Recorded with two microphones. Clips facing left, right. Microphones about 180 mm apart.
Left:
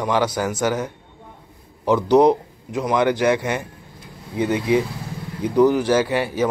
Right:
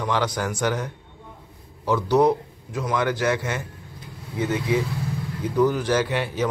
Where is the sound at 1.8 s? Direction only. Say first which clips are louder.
Left 4 dB; 20° left (ahead or behind).